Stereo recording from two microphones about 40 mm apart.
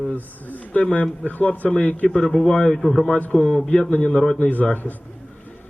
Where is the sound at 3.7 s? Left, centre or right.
Left.